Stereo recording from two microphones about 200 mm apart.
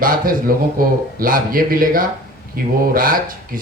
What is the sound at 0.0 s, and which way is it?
A man's voice, 45° right (ahead or behind).